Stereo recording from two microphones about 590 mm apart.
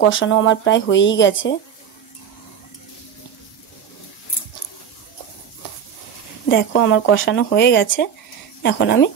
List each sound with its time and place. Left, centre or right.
0.0 s speech: centre
6.5 s speech: centre